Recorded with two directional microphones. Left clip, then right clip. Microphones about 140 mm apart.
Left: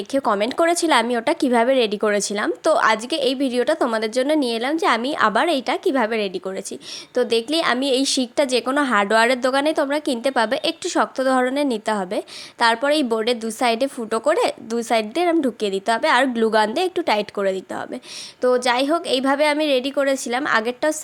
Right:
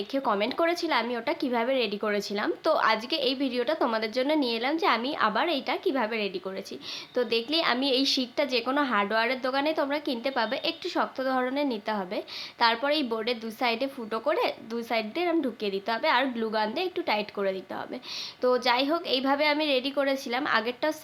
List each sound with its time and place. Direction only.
0.1 s a woman's voice: 45° left (ahead or behind)